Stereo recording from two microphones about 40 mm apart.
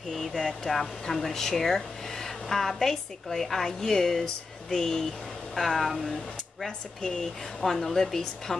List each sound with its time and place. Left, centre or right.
0.1 s a woman's voice: centre
5.5 s speech: centre
7.0 s a woman's voice: centre